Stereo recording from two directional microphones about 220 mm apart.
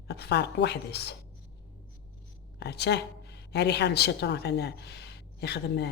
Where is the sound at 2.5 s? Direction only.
50° left (ahead or behind).